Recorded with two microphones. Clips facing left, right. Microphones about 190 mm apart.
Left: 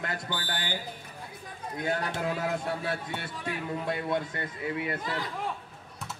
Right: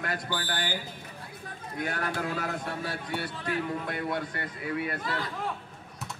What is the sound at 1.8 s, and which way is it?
Speech, 25° left (ahead or behind).